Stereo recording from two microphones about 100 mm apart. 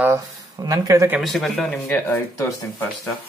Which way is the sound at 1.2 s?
5° left (ahead or behind).